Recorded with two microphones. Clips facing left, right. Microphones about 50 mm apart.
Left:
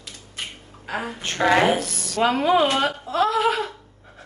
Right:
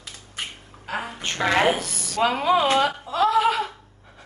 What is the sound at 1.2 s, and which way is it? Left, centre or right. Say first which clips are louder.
A woman's voice: left 3 dB; centre.